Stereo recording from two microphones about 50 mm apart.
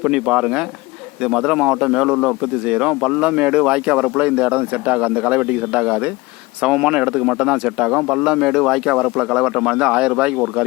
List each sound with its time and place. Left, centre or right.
0.0 s speech: right